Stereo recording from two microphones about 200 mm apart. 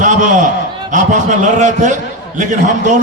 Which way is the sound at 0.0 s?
40° right (ahead or behind).